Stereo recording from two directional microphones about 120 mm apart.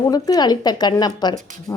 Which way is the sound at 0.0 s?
30° left (ahead or behind).